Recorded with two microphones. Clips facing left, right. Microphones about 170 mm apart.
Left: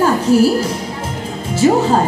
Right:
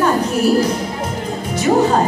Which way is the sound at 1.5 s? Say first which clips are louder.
Left 2 dB; 30° left (ahead or behind).